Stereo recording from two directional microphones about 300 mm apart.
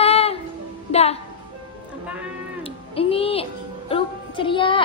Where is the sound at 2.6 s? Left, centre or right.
Centre.